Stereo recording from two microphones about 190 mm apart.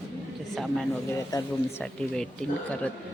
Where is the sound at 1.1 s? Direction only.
15° left (ahead or behind).